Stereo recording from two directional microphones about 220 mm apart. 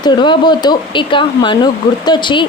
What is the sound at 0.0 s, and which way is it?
A woman's voice, 20° left (ahead or behind).